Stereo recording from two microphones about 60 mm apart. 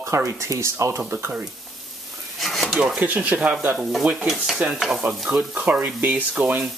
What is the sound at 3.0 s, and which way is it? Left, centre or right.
Speech, right.